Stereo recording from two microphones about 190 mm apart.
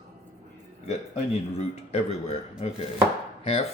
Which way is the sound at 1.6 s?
30° left (ahead or behind).